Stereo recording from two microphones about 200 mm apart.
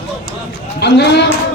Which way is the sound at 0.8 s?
55° left (ahead or behind).